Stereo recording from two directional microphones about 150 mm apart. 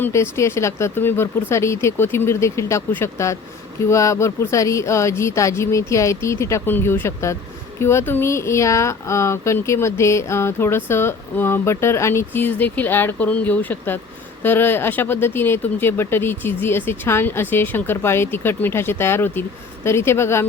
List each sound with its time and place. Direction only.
0.0 s speech: 15° left (ahead or behind)